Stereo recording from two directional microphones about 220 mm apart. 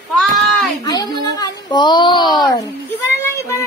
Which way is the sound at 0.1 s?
Centre (ahead or behind).